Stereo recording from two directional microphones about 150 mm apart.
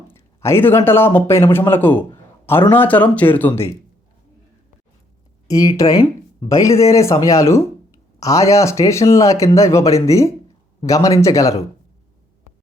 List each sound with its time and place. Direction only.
0.1 s speech: 15° left (ahead or behind)
5.5 s speech: 25° left (ahead or behind)